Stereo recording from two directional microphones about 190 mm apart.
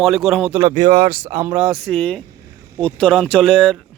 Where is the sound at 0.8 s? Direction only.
60° right (ahead or behind).